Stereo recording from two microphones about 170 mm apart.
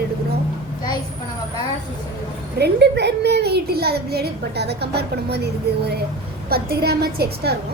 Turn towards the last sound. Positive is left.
turn(degrees=-70)  # may be behind; listen again after turning